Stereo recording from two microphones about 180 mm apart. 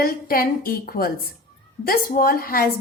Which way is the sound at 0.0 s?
55° left (ahead or behind).